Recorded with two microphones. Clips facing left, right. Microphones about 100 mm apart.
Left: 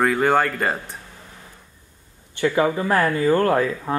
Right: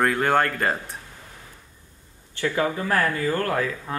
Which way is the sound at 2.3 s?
20° left (ahead or behind).